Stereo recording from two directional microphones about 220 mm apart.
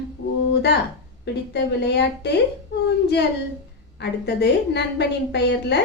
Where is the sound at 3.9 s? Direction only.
50° left (ahead or behind).